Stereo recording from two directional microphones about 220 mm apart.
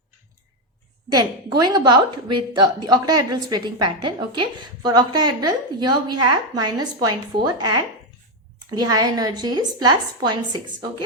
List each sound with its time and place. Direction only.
1.1 s a woman's voice: 15° right (ahead or behind)